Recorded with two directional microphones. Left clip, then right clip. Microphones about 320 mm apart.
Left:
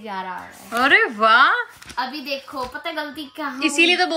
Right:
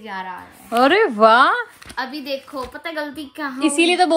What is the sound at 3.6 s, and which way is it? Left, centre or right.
Speech, centre.